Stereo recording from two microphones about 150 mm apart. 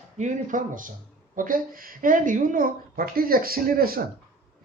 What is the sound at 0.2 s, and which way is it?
Speech, 55° right (ahead or behind).